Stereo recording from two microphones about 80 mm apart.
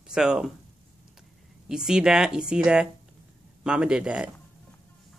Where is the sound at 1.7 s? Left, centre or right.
Centre.